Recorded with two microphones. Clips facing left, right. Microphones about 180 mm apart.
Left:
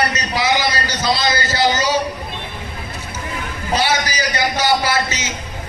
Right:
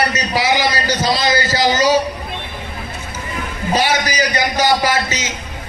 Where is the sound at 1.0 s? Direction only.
10° right (ahead or behind).